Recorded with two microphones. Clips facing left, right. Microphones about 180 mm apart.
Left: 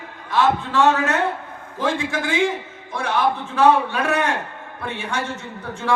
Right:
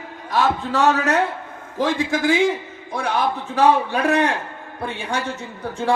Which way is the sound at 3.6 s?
35° right (ahead or behind).